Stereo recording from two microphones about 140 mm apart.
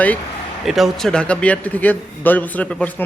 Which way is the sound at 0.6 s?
Centre (ahead or behind).